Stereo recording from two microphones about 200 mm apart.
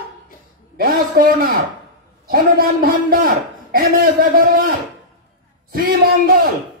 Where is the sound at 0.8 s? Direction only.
45° right (ahead or behind).